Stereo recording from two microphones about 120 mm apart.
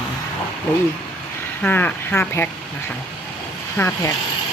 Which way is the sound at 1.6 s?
15° left (ahead or behind).